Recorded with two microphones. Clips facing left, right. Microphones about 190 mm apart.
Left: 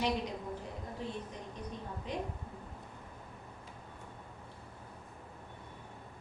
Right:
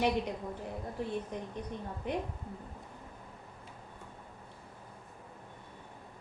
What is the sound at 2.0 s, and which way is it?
Speech, 60° right (ahead or behind).